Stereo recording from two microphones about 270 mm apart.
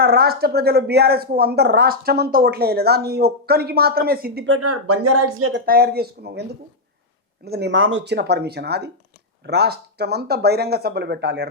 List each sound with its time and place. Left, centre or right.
0.0 s a woman's voice: right
4.5 s speech: right
7.4 s a woman's voice: right